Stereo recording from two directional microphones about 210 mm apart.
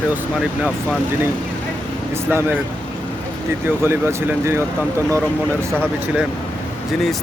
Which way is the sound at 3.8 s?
10° right (ahead or behind).